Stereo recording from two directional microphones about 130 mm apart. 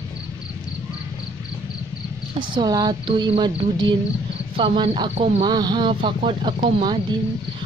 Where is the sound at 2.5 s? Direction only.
30° right (ahead or behind).